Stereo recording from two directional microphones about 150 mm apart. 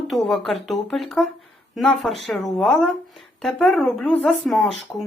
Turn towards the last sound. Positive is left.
turn(degrees=0)  # may be behind; listen again after turning